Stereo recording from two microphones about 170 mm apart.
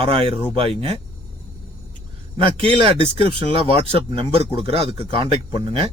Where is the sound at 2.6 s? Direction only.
30° right (ahead or behind).